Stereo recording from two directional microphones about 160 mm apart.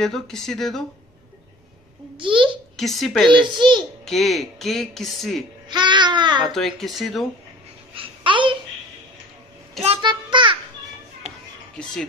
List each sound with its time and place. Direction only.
0.0 s speech: centre (ahead or behind)
2.1 s a child's voice: 30° right (ahead or behind)
2.8 s speech: centre (ahead or behind)
3.3 s babbling: 30° right (ahead or behind)
4.0 s speech: centre (ahead or behind)
5.7 s babbling: 30° right (ahead or behind)
6.4 s speech: centre (ahead or behind)
7.9 s babbling: 35° right (ahead or behind)
9.8 s a sound: 30° right (ahead or behind)
11.7 s speech: 5° left (ahead or behind)